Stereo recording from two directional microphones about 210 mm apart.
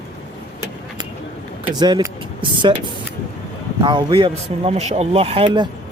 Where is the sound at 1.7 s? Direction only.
20° right (ahead or behind).